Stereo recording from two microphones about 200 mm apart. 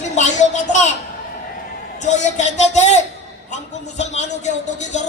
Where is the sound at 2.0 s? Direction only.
35° left (ahead or behind).